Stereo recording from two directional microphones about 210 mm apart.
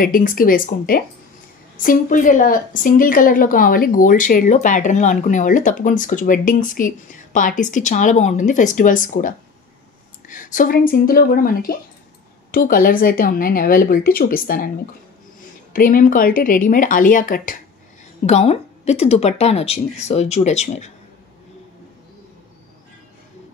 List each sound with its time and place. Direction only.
0.0 s a woman's voice: 40° left (ahead or behind)
15.7 s a woman's voice: 40° left (ahead or behind)